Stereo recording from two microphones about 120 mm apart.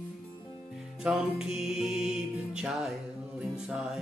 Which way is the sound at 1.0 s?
5° right (ahead or behind).